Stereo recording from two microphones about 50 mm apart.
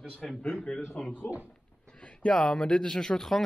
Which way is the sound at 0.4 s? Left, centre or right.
Centre.